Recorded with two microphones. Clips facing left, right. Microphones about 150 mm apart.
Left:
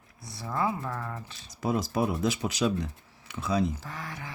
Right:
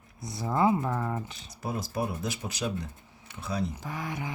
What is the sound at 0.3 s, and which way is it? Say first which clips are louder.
Speech: right 5 dB; 20° right (ahead or behind).